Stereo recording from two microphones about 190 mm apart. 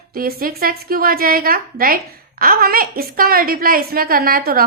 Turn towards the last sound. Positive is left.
turn(degrees=-50)  # may be behind; listen again after turning